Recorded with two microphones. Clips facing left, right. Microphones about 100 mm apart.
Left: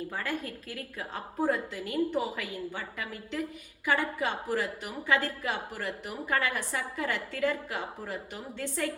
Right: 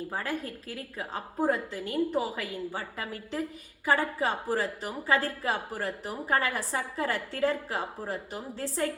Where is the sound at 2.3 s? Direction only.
35° right (ahead or behind).